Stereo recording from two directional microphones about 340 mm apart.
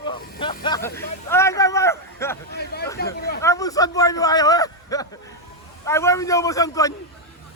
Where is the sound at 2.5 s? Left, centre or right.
Left.